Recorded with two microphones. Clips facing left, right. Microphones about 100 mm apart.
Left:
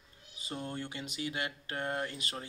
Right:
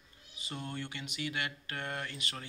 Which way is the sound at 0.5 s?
15° left (ahead or behind).